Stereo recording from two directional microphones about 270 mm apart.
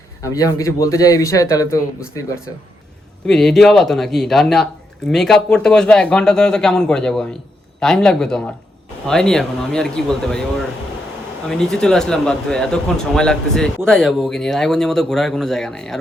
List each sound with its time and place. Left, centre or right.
0.2 s speech: centre